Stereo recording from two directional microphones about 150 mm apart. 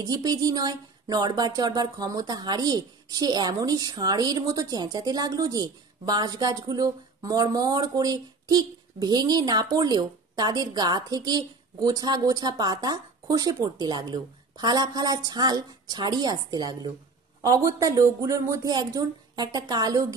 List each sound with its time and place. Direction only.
0.0 s speech: 25° right (ahead or behind)